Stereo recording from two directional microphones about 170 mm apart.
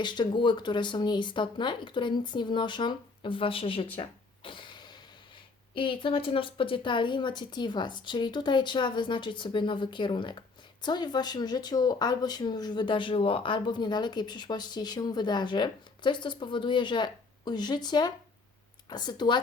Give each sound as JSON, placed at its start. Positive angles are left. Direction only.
{"t": 0.0, "sound": "speech", "side_deg": 25}
{"t": 3.9, "sound": "a sound", "side_deg": 30}
{"t": 5.7, "sound": "speech", "side_deg": 30}